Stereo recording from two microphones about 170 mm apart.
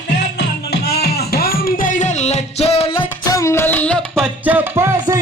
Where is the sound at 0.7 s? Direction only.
70° left (ahead or behind); by 3.4 s 30° left (ahead or behind).